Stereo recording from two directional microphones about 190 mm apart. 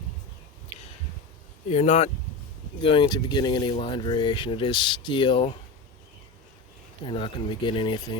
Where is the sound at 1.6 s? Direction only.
35° left (ahead or behind).